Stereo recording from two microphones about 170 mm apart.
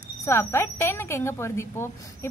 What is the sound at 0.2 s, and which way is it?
Speech, 15° left (ahead or behind).